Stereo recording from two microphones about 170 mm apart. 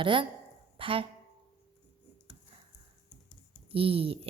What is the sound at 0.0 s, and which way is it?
A woman's voice, 30° right (ahead or behind).